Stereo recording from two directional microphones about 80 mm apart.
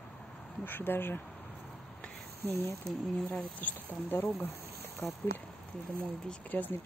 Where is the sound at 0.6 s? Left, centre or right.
Left.